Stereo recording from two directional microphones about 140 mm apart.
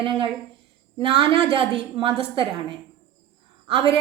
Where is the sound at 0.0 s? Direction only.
40° right (ahead or behind).